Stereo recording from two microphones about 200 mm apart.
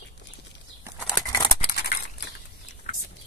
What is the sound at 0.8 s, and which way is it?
Bird flight, 5° right (ahead or behind).